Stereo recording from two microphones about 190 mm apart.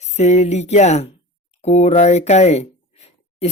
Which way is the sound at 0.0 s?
35° left (ahead or behind).